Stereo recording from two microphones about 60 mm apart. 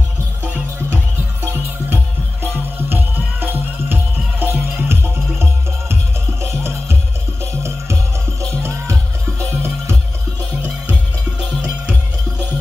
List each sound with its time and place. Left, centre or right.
2.8 s music: right
6.4 s music: right